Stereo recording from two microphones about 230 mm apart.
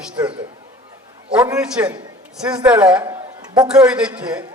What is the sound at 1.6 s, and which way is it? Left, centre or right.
A man's voice, centre.